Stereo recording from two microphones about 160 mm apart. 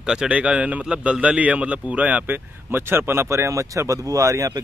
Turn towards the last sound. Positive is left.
turn(degrees=-20)  # may be behind; listen again after turning